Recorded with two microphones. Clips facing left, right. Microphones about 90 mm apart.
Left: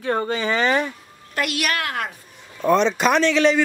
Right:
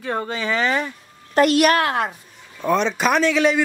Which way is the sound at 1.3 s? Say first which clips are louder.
Right 9 dB; 40° right (ahead or behind).